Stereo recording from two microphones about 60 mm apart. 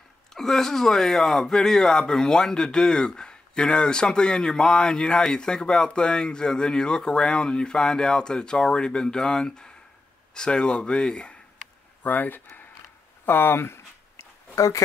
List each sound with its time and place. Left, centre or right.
0.3 s speech: centre
12.0 s speech: left
14.5 s speech: left